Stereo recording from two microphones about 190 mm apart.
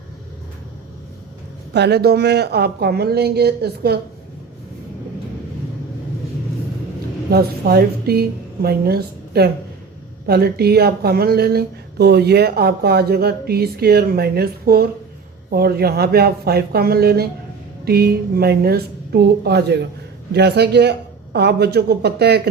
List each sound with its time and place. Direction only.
1.7 s speech: 60° right (ahead or behind)
7.3 s a woman's voice: 55° right (ahead or behind)